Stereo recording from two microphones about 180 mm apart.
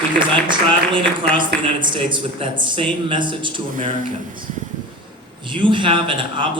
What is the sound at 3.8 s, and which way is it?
Speech, 50° right (ahead or behind).